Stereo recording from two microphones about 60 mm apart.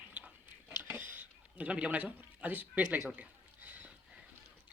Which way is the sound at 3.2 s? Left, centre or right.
Right.